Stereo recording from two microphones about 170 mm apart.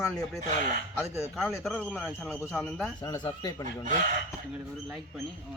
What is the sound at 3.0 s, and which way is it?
Speech, 25° left (ahead or behind).